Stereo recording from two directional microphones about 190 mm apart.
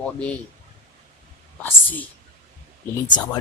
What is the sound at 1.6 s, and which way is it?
Speech, 10° left (ahead or behind).